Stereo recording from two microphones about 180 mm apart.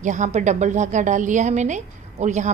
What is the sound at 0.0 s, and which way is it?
A woman's voice, 45° right (ahead or behind).